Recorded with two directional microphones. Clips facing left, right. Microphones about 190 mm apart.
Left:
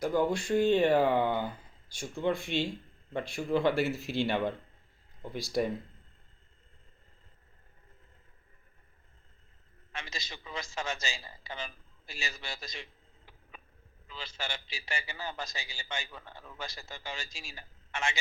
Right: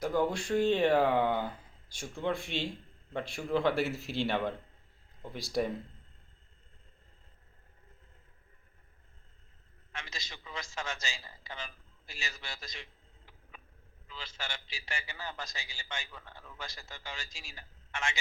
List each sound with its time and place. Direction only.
0.0 s speech: centre (ahead or behind)
9.9 s a man's voice: 20° left (ahead or behind)
14.3 s a man's voice: 20° left (ahead or behind)